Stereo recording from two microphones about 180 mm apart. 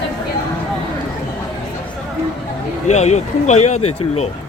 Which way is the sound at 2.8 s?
40° left (ahead or behind).